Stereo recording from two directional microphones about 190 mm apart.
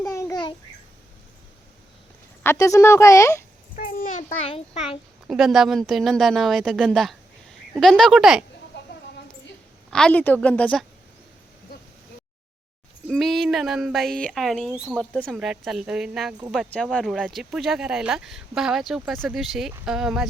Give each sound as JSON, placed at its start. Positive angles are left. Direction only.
{"t": 0.1, "sound": "babbling", "side_deg": 15}
{"t": 2.4, "sound": "speech", "side_deg": 15}
{"t": 3.8, "sound": "a child's voice", "side_deg": 45}
{"t": 5.3, "sound": "speech", "side_deg": 0}
{"t": 8.7, "sound": "a sound", "side_deg": 65}
{"t": 9.9, "sound": "speech", "side_deg": 5}
{"t": 13.1, "sound": "speech", "side_deg": 0}